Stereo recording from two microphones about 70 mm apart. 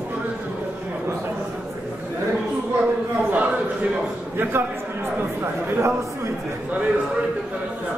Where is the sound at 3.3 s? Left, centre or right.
Centre.